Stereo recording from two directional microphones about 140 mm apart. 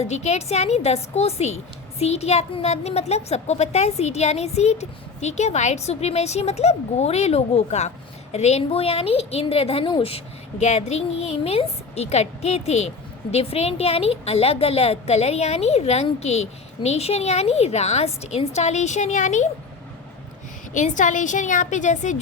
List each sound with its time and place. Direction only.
0.0 s a child's voice: 50° left (ahead or behind)
20.7 s a woman's voice: 65° left (ahead or behind)